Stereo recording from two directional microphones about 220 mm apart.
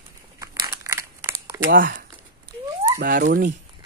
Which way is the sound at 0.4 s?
15° right (ahead or behind).